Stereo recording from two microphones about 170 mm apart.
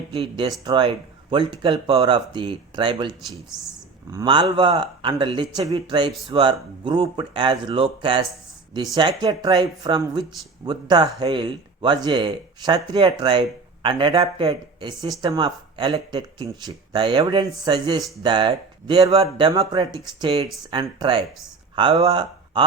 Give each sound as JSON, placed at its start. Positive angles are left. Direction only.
{"t": 0.1, "sound": "speech", "side_deg": -30}
{"t": 4.1, "sound": "speech", "side_deg": -25}